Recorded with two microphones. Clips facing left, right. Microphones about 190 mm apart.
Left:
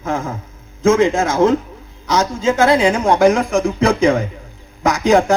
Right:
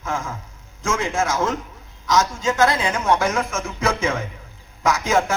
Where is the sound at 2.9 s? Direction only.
30° left (ahead or behind).